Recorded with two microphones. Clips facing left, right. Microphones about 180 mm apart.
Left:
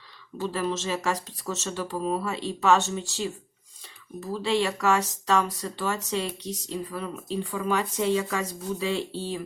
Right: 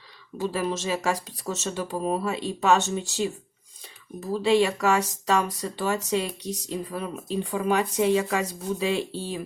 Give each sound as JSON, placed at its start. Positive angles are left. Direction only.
{"t": 0.3, "sound": "speech", "side_deg": -15}